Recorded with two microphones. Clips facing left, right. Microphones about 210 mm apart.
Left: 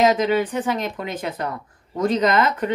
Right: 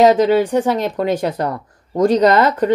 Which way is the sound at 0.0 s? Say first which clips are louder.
Right 6 dB; 35° right (ahead or behind).